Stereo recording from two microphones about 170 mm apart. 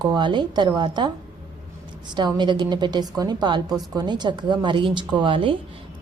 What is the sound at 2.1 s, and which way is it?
A woman's voice, 25° right (ahead or behind).